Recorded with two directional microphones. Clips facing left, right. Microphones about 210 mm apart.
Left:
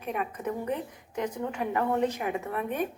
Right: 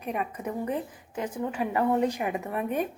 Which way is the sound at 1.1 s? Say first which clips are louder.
Right 1 dB; 5° right (ahead or behind).